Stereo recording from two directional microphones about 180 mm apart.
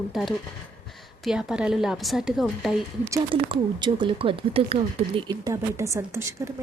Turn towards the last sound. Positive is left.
turn(degrees=-15)  # may be behind; listen again after turning